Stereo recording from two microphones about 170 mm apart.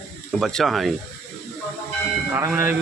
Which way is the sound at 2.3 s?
15° right (ahead or behind).